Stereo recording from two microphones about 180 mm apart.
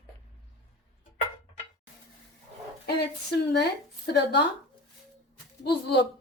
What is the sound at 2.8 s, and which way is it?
Speech, 65° left (ahead or behind).